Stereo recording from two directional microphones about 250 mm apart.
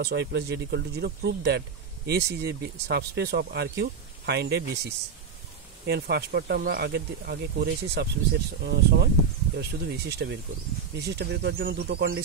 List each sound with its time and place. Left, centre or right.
0.0 s speech: right